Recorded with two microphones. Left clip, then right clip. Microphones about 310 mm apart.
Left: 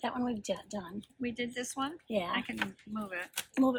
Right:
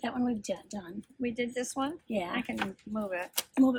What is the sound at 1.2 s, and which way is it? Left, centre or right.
Speech, centre.